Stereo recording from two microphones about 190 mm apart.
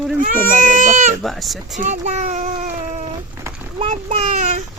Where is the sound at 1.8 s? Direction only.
40° right (ahead or behind).